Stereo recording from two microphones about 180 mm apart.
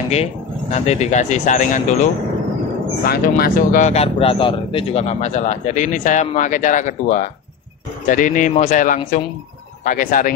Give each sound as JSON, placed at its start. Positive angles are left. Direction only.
{"t": 0.1, "sound": "speech", "side_deg": 35}
{"t": 3.1, "sound": "speech", "side_deg": 55}